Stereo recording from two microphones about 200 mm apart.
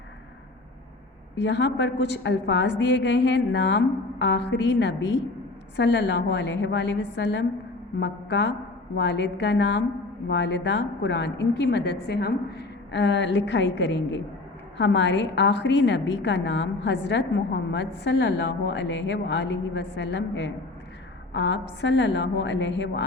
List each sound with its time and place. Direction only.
1.4 s a woman's voice: 60° left (ahead or behind)